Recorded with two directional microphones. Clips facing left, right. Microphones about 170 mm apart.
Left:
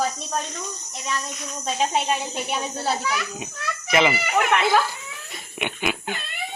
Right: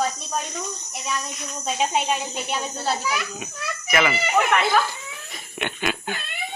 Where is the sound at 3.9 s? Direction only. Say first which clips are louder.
Left 2 dB; 20° left (ahead or behind).